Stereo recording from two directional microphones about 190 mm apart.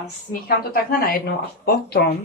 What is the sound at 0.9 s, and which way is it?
Speech, 50° left (ahead or behind).